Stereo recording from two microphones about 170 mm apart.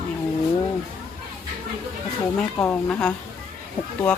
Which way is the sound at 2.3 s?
5° left (ahead or behind).